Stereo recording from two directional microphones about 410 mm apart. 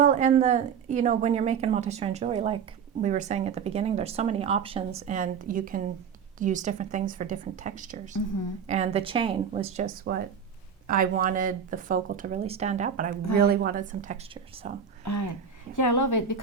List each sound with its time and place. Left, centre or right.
0.0 s speech: centre
15.0 s a woman's voice: left